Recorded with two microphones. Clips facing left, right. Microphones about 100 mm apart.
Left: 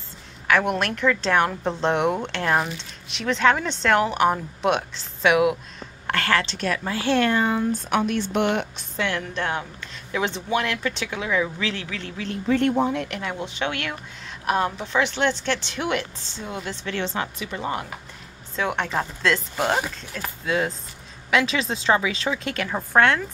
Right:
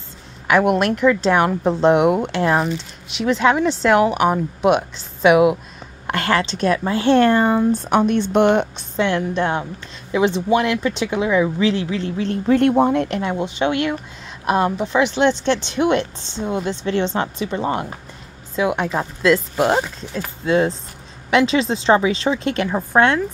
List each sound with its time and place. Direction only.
0.5 s a woman's voice: 15° right (ahead or behind)
12.6 s speech: 65° right (ahead or behind)
12.9 s a woman's voice: 35° right (ahead or behind)
18.6 s speech: 10° right (ahead or behind)
19.6 s a woman's voice: 20° right (ahead or behind)
22.7 s a woman's voice: 20° right (ahead or behind)